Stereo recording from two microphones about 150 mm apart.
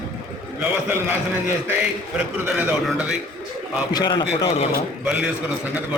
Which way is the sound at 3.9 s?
30° left (ahead or behind).